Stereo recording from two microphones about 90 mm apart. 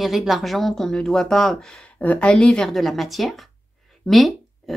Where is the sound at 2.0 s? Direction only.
15° left (ahead or behind); by 3.4 s centre (ahead or behind).